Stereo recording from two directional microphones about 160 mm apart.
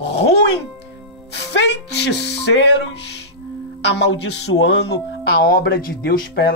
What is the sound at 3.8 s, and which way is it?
Speech, 90° left.